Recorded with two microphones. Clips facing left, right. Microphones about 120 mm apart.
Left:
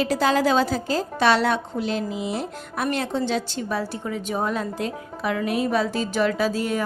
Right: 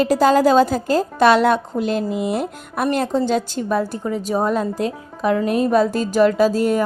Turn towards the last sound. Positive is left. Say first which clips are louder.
# right 7 dB
turn(degrees=-45)  # may be behind; listen again after turning